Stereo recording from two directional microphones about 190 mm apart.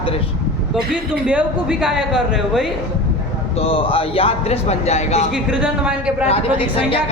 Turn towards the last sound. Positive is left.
turn(degrees=-5)  # may be behind; listen again after turning